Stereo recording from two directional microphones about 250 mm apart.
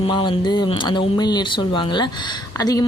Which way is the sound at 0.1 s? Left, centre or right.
Centre.